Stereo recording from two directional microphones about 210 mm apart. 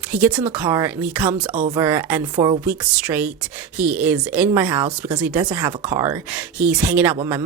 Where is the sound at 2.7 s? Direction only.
5° right (ahead or behind).